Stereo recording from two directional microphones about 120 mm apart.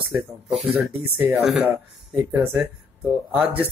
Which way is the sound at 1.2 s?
5° right (ahead or behind).